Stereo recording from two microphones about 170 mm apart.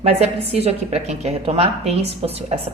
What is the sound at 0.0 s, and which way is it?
A woman's voice, 35° right (ahead or behind).